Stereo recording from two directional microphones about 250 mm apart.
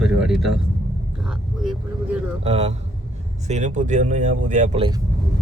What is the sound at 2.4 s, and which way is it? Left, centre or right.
Speech, right.